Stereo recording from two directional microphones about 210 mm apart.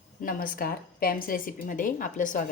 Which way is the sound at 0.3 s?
40° left (ahead or behind).